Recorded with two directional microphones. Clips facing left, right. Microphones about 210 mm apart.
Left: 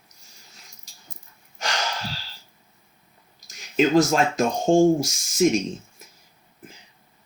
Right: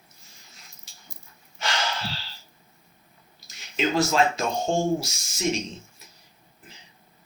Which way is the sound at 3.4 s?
45° left (ahead or behind).